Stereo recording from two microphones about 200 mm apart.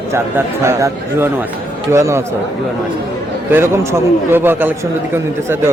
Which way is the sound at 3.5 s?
10° right (ahead or behind).